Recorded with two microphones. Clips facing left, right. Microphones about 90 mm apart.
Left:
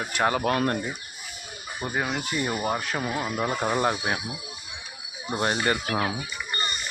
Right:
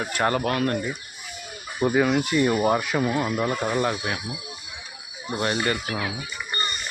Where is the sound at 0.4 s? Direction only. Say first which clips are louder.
Even; 25° left (ahead or behind).